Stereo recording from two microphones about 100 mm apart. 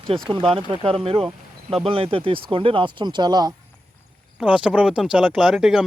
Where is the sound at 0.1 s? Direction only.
60° right (ahead or behind); by 3.5 s 45° right (ahead or behind).